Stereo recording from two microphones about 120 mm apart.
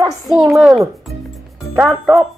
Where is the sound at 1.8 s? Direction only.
20° right (ahead or behind).